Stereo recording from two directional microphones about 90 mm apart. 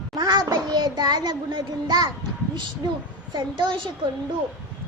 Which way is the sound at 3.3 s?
55° right (ahead or behind).